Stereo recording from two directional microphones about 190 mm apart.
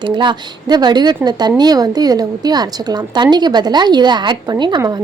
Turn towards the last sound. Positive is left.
turn(degrees=-20)  # may be behind; listen again after turning